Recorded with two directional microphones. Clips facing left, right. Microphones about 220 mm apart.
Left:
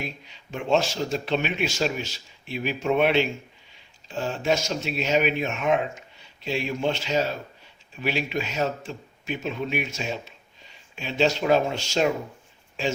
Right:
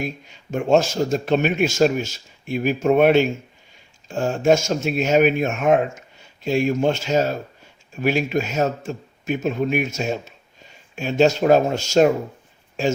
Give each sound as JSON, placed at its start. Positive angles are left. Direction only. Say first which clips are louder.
{"t": 0.0, "sound": "a man's voice", "louder": "right 7 dB", "side_deg": -45}